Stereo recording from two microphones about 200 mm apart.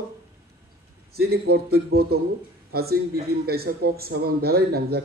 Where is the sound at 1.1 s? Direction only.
50° right (ahead or behind).